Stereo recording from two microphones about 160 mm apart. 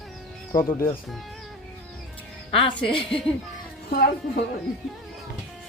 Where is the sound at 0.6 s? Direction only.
25° left (ahead or behind).